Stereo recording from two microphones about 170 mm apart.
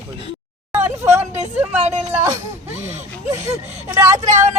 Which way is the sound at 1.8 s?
40° right (ahead or behind).